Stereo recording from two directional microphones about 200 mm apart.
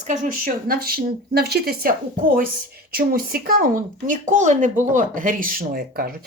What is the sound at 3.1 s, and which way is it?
Speech, 45° right (ahead or behind).